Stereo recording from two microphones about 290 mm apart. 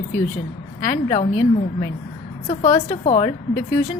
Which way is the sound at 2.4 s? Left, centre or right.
Left.